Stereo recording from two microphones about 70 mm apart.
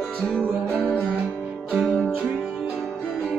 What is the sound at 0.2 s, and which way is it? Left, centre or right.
Music, centre.